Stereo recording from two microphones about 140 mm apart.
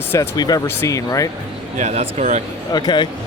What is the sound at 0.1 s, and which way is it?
Speech, 25° left (ahead or behind).